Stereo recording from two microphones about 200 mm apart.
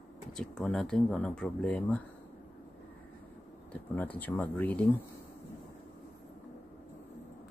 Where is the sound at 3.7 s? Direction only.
10° left (ahead or behind).